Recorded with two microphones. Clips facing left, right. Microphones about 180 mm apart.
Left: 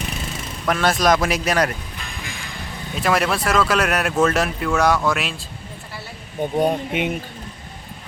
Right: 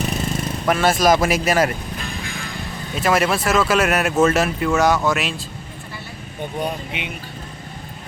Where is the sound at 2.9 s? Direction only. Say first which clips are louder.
Right 2 dB; centre (ahead or behind).